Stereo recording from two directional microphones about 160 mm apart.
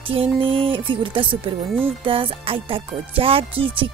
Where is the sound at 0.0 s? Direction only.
35° right (ahead or behind).